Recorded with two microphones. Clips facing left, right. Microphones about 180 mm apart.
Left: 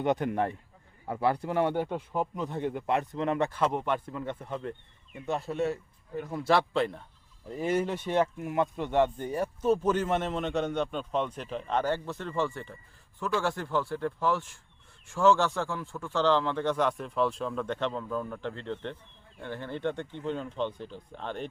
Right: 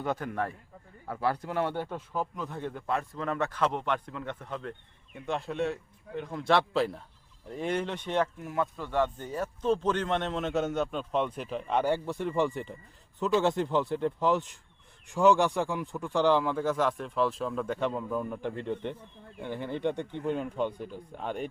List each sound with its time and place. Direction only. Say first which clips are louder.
0.0 s a man's voice: left 4 dB; 15° left (ahead or behind); by 21.4 s 10° right (ahead or behind)